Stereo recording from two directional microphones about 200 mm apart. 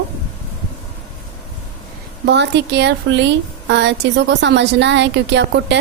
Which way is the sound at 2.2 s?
60° right (ahead or behind).